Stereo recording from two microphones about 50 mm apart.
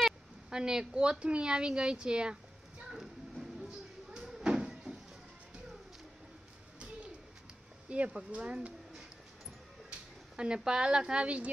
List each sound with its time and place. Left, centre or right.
0.5 s a woman's voice: centre
2.9 s a sound: centre
4.1 s cupboard open or close: centre
4.6 s a sound: centre
7.9 s speech: right
9.8 s speech: centre